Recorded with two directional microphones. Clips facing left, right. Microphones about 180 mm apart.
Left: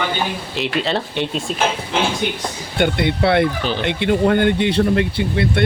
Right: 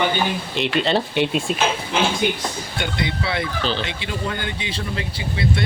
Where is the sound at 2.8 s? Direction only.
60° left (ahead or behind).